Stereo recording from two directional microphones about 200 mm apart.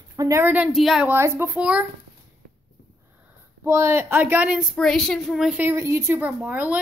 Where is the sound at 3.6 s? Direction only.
15° right (ahead or behind).